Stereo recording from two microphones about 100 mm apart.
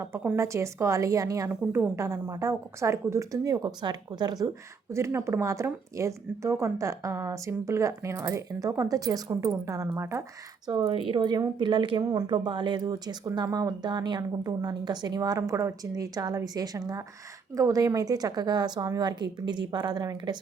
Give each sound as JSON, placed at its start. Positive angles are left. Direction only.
{"t": 0.3, "sound": "a woman's voice", "side_deg": -30}
{"t": 1.5, "sound": "a woman's voice", "side_deg": -20}
{"t": 10.7, "sound": "a woman's voice", "side_deg": -55}